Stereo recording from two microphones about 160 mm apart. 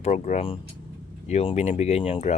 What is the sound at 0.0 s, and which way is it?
Speech, 45° left (ahead or behind).